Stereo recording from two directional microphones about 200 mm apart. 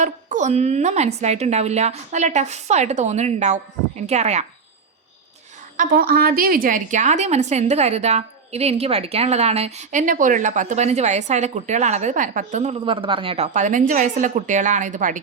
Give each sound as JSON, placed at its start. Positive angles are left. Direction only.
{"t": 0.0, "sound": "a woman's voice", "side_deg": -35}
{"t": 5.7, "sound": "a woman's voice", "side_deg": -45}